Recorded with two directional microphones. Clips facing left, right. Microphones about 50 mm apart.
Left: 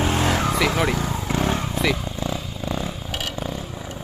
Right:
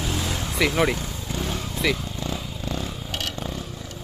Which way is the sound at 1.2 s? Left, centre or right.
Left.